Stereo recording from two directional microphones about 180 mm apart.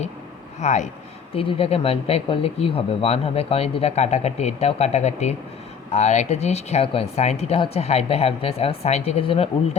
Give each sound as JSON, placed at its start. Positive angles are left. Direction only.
{"t": 0.6, "sound": "speech", "side_deg": 40}